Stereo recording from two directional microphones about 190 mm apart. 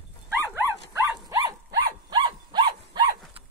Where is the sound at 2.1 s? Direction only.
25° right (ahead or behind).